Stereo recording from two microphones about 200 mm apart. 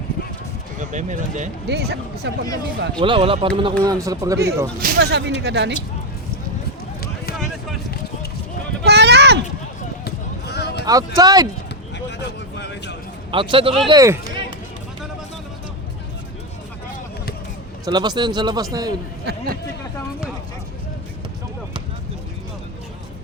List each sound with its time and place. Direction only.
0.8 s speech: 40° right (ahead or behind)
1.6 s speech: 55° right (ahead or behind)
3.0 s a man's voice: 25° right (ahead or behind)
4.8 s speech: 60° right (ahead or behind)
8.8 s a sound: 55° right (ahead or behind)
10.0 s basketball bounce: 55° left (ahead or behind)
10.8 s speech: 20° right (ahead or behind)
12.5 s a sound: 60° left (ahead or behind)
13.3 s a man's voice: 25° right (ahead or behind)
17.8 s a man's voice: 20° right (ahead or behind)
19.2 s speech: 55° right (ahead or behind)